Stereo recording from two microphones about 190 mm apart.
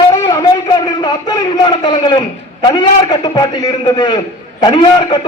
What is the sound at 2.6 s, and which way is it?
A man's voice, 25° left (ahead or behind).